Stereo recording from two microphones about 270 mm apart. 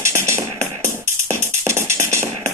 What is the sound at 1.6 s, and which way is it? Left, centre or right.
Music, centre.